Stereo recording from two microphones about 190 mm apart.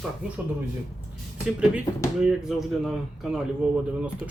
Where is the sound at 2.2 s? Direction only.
Centre (ahead or behind).